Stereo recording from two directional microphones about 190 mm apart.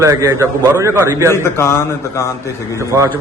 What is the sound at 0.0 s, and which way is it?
A man's voice, 15° right (ahead or behind).